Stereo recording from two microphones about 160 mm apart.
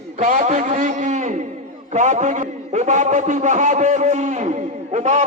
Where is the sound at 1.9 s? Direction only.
50° right (ahead or behind).